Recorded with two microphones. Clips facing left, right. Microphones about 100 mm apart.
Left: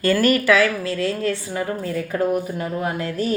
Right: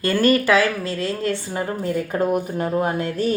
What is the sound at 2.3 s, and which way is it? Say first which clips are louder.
Speech: right 2 dB; 30° right (ahead or behind).